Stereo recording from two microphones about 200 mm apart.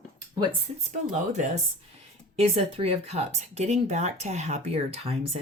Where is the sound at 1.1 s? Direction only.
35° right (ahead or behind).